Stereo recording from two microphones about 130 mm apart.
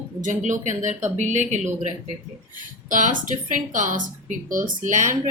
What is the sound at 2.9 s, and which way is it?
Speech, 90° right.